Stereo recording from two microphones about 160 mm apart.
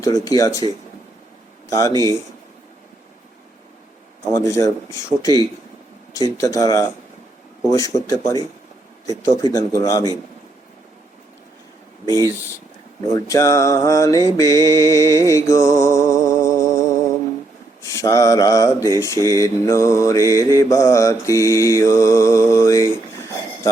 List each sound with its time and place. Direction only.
0.0 s mantra: 20° left (ahead or behind)
1.7 s mantra: 20° left (ahead or behind)
4.4 s mantra: 20° left (ahead or behind)
12.0 s speech: 25° right (ahead or behind)
13.1 s mantra: 20° left (ahead or behind)
14.3 s music: 20° left (ahead or behind)
17.8 s mantra: 20° left (ahead or behind)